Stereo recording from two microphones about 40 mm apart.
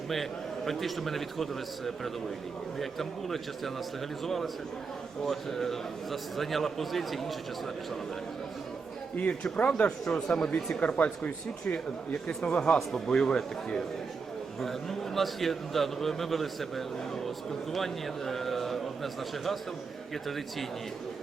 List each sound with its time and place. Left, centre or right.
0.1 s a man's voice: centre
9.1 s speech: left
10.1 s a man's voice: centre
10.8 s speech: left
12.5 s a man's voice: left
14.6 s a man's voice: centre